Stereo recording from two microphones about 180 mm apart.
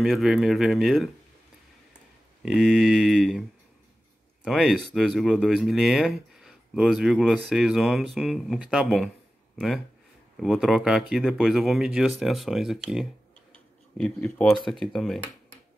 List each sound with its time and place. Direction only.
0.0 s speech: centre (ahead or behind)
2.4 s speech: centre (ahead or behind)
4.5 s speech: centre (ahead or behind)
10.4 s speech: centre (ahead or behind)